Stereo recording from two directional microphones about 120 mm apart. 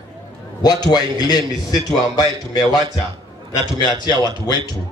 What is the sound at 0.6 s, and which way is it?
A man's voice, 35° left (ahead or behind).